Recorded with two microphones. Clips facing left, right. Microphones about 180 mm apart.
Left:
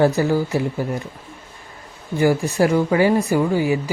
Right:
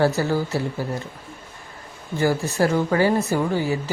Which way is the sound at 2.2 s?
15° left (ahead or behind).